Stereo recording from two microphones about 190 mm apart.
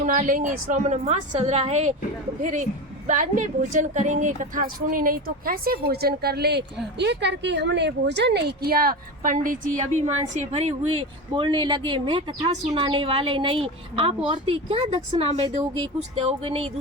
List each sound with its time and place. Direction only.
0.0 s a woman's voice: 45° right (ahead or behind)
11.3 s a woman's voice: 25° right (ahead or behind)